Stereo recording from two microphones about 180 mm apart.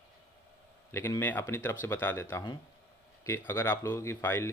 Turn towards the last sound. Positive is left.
turn(degrees=15)  # may be behind; listen again after turning